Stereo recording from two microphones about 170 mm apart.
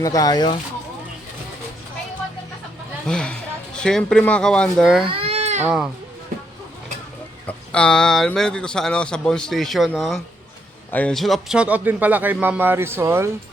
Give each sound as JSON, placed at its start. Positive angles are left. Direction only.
{"t": 0.0, "sound": "speech", "side_deg": 20}
{"t": 3.1, "sound": "speech", "side_deg": 5}
{"t": 5.0, "sound": "baby cry", "side_deg": -35}
{"t": 5.6, "sound": "speech", "side_deg": -5}
{"t": 7.4, "sound": "speech", "side_deg": 5}